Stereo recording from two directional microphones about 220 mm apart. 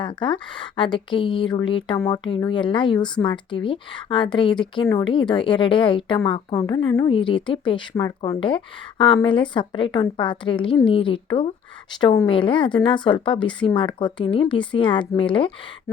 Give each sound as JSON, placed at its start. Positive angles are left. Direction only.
{"t": 0.0, "sound": "speech", "side_deg": 20}